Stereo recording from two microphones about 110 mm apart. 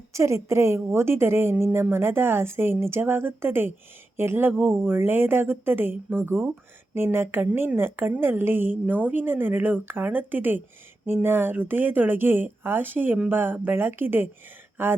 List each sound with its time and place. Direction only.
0.1 s a woman's voice: 25° right (ahead or behind)